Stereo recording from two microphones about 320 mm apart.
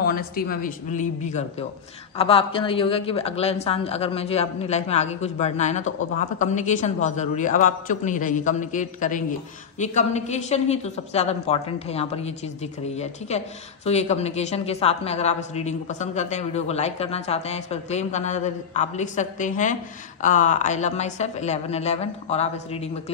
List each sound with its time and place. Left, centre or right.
0.0 s a woman's voice: left